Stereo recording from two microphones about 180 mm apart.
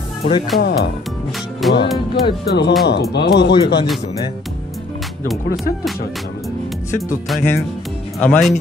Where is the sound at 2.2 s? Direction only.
70° left (ahead or behind).